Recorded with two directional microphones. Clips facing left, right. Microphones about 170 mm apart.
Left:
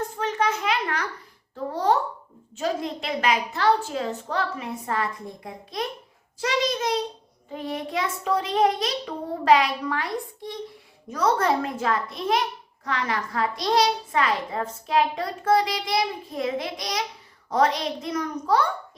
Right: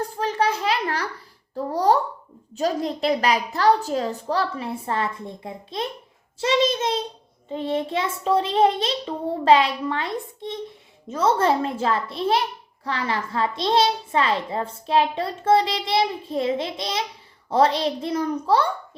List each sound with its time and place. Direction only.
0.2 s a sound: 35° right (ahead or behind)
1.5 s babbling: 35° right (ahead or behind)
2.6 s a woman's voice: 35° right (ahead or behind)